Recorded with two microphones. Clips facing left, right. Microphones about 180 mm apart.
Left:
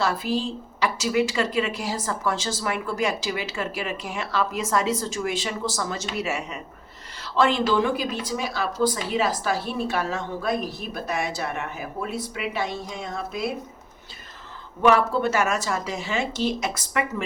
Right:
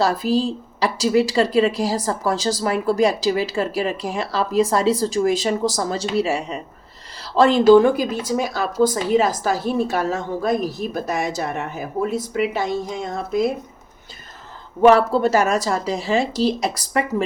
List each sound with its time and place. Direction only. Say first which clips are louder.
0.0 s a woman's voice: right 6 dB; 35° right (ahead or behind)
14.8 s a woman's voice: right 6 dB; 40° right (ahead or behind)